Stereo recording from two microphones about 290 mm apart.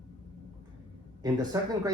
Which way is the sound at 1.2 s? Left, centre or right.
Centre.